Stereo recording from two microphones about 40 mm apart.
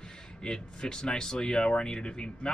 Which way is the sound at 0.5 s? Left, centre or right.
Centre.